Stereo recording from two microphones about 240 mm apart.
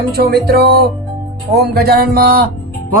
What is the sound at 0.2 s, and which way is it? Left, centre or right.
Speech, right.